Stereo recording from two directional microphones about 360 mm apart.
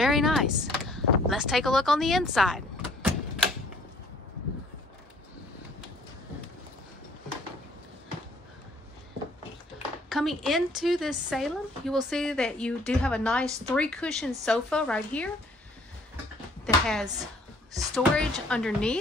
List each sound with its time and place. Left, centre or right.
0.0 s a sound: centre
10.0 s speech: centre
16.6 s speech: centre